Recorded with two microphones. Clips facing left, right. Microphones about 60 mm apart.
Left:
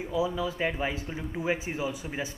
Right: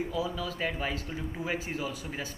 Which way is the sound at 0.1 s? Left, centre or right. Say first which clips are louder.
Left 4 dB; centre.